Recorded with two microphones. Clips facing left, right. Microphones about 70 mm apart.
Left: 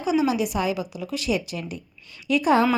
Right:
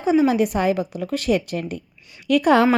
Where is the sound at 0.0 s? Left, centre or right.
Right.